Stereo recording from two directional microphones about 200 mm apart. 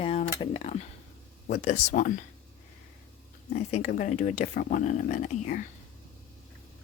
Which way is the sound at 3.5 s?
35° left (ahead or behind).